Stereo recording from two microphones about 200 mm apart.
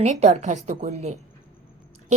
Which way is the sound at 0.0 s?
35° right (ahead or behind).